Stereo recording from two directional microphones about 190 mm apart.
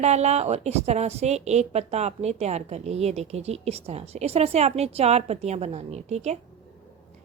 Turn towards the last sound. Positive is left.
turn(degrees=-35)  # may be behind; listen again after turning